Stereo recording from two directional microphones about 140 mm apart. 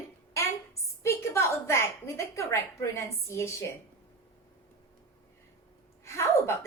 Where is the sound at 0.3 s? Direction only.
20° left (ahead or behind).